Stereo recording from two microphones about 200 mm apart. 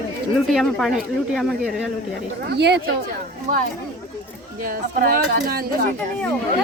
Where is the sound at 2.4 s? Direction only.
55° right (ahead or behind).